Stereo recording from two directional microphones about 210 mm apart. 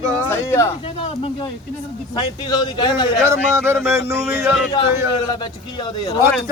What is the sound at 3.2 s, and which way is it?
Speech, 15° right (ahead or behind).